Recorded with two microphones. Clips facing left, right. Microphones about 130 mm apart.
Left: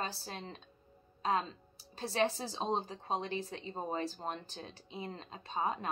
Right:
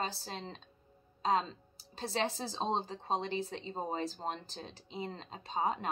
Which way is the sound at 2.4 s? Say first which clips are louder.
Right 1 dB; 30° right (ahead or behind).